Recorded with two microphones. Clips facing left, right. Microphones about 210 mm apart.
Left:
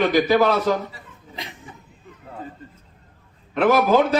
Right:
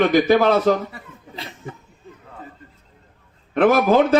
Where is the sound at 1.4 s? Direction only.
15° left (ahead or behind).